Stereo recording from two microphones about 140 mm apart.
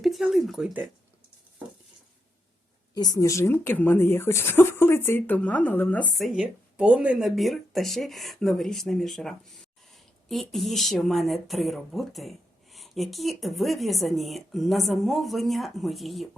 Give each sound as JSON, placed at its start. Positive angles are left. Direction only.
{"t": 0.0, "sound": "speech", "side_deg": 0}
{"t": 2.9, "sound": "speech", "side_deg": 30}
{"t": 6.1, "sound": "speech", "side_deg": -5}